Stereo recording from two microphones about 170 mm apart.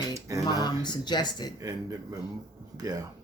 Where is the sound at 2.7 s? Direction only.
20° right (ahead or behind).